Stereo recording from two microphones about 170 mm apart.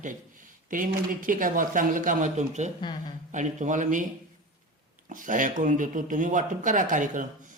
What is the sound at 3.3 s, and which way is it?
Speech, 45° right (ahead or behind).